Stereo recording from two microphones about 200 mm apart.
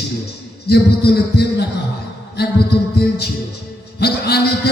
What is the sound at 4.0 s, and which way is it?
Speech, 55° left (ahead or behind).